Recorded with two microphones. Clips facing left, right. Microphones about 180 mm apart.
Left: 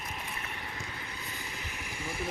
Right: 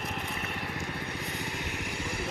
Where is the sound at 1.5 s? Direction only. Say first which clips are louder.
Right 6 dB; 75° right (ahead or behind).